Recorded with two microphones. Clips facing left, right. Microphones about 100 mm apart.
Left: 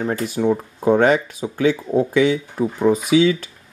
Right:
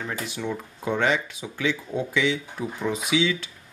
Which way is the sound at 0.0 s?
40° left (ahead or behind).